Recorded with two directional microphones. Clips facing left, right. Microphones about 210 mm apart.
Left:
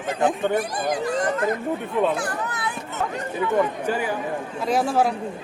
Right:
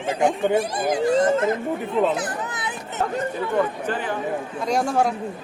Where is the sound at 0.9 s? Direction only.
25° right (ahead or behind).